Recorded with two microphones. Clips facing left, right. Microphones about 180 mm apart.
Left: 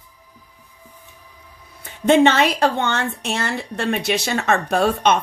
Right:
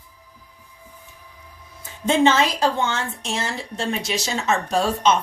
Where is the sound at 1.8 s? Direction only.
65° left (ahead or behind).